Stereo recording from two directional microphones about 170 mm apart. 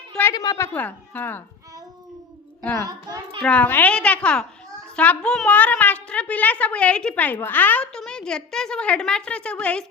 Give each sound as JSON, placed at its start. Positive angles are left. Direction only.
{"t": 0.1, "sound": "a sound", "side_deg": 10}
{"t": 0.3, "sound": "a woman's voice", "side_deg": 20}
{"t": 0.7, "sound": "a woman's voice", "side_deg": 10}
{"t": 2.8, "sound": "a child's voice", "side_deg": -20}
{"t": 3.4, "sound": "a woman's voice", "side_deg": 5}